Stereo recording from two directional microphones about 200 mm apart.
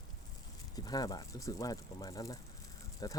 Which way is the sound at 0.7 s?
20° left (ahead or behind).